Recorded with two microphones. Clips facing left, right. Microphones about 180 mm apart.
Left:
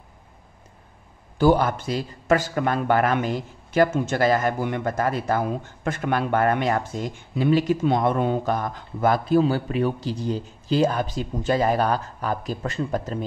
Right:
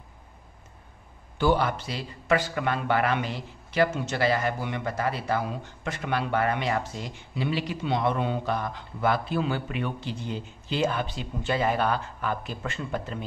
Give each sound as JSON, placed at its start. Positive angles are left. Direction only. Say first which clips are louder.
{"t": 1.4, "sound": "a man's voice", "louder": "left 5 dB", "side_deg": 45}